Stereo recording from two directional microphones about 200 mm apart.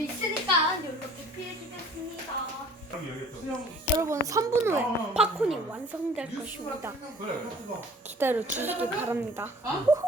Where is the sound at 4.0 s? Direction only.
15° right (ahead or behind).